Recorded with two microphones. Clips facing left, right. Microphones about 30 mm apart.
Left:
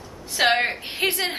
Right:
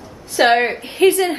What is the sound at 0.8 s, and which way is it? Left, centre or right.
Speech, left.